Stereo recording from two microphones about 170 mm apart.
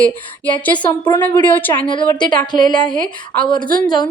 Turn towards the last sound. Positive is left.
turn(degrees=25)  # may be behind; listen again after turning